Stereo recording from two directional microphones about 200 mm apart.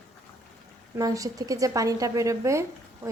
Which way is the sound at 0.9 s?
15° right (ahead or behind).